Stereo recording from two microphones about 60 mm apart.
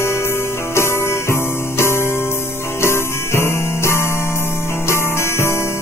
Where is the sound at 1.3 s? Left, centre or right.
Left.